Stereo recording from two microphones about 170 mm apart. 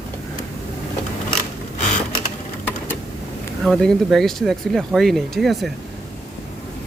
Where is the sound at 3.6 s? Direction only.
Centre (ahead or behind).